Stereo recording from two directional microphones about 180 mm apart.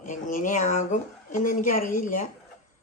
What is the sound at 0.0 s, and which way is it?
Speech, 45° left (ahead or behind).